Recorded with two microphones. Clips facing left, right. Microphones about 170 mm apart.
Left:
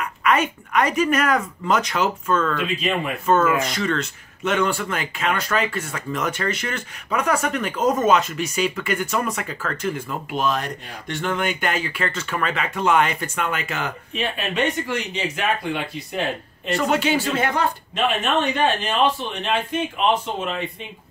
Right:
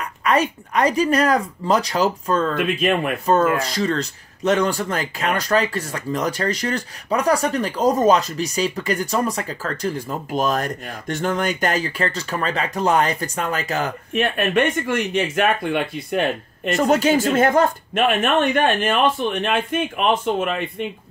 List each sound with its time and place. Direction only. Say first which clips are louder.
0.0 s speech: right 1 dB; 35° right (ahead or behind)
2.5 s speech: right 4 dB; 55° right (ahead or behind)
3.3 s speech: even; 35° right (ahead or behind)
14.1 s speech: right 6 dB; 55° right (ahead or behind)
16.7 s speech: right 4 dB; 40° right (ahead or behind)